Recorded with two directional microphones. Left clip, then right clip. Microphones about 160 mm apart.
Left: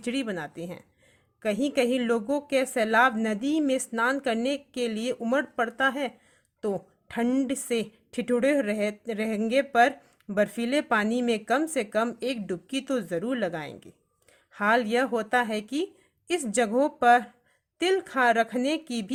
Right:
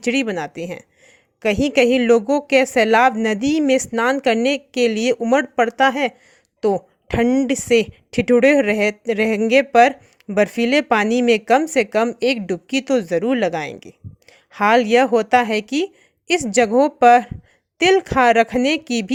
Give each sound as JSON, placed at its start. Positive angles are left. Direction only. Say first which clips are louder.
{"t": 0.0, "sound": "a woman's voice", "louder": "right 11 dB", "side_deg": -40}